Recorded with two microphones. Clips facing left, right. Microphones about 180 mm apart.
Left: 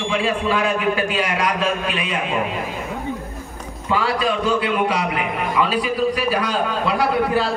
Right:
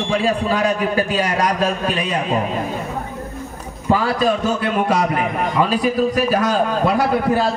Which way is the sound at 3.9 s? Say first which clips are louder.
Right 4 dB; 45° right (ahead or behind).